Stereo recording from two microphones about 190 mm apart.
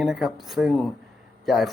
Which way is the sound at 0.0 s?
Centre (ahead or behind).